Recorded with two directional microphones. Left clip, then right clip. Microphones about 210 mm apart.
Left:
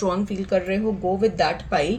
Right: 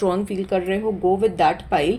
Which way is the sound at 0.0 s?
35° right (ahead or behind).